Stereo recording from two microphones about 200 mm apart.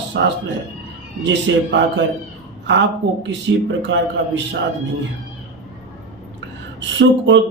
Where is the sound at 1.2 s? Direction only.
60° right (ahead or behind).